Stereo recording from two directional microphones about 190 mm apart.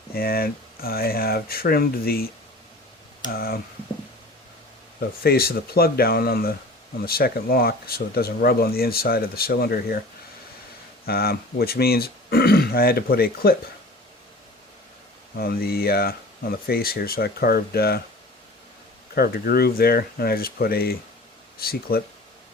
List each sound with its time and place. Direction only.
0.1 s speech: 50° left (ahead or behind)
3.3 s speech: 50° left (ahead or behind)
4.9 s speech: 55° left (ahead or behind)
11.0 s speech: 55° left (ahead or behind)
15.4 s speech: 50° left (ahead or behind)
19.1 s speech: 55° left (ahead or behind)